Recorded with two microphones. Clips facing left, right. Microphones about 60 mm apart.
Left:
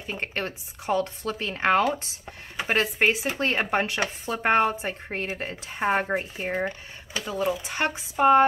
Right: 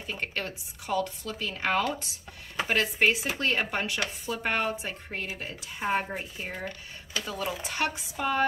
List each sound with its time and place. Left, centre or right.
0.0 s speech: left
7.2 s speech: left
7.8 s speech: left